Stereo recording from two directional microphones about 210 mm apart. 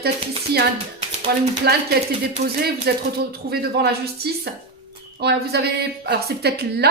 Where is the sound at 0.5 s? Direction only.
50° right (ahead or behind).